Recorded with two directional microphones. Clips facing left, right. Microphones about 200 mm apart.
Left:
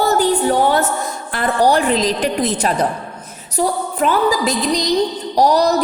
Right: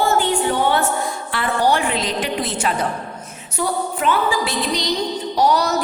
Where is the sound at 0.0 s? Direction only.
40° left (ahead or behind).